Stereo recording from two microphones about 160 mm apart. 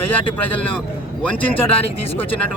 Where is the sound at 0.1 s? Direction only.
10° left (ahead or behind).